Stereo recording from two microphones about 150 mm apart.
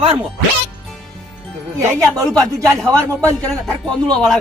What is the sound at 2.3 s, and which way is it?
Speech, 25° right (ahead or behind).